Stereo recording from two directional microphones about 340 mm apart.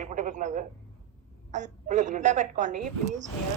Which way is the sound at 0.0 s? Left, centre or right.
Right.